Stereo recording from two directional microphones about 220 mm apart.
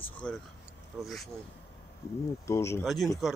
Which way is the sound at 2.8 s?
Centre (ahead or behind).